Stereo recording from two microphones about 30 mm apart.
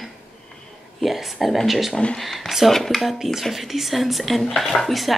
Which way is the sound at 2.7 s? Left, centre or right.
Centre.